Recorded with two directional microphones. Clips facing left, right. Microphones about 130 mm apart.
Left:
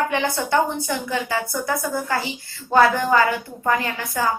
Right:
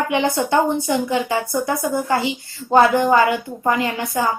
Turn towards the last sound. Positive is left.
turn(degrees=-20)  # may be behind; listen again after turning